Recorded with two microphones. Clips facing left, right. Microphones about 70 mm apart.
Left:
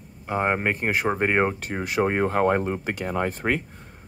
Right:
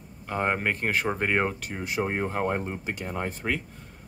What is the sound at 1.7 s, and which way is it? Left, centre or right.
Speech, left.